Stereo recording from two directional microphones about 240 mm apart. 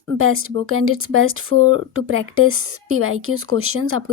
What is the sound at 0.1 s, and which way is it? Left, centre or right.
Speech, right.